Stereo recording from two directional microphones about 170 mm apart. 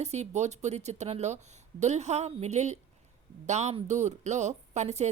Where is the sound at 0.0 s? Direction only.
40° right (ahead or behind).